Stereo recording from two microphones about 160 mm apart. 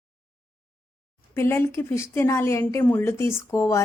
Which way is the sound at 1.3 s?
15° left (ahead or behind).